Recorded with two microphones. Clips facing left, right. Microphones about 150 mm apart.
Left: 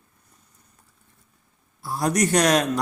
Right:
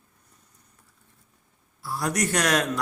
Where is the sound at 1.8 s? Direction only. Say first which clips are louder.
Left 4 dB; 20° left (ahead or behind).